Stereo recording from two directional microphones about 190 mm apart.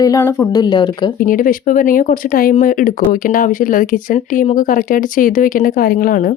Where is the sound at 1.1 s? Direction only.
45° left (ahead or behind).